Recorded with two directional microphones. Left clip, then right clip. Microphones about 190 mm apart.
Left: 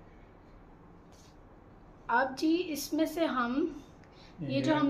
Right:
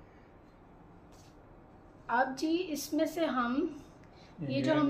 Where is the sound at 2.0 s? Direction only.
10° left (ahead or behind).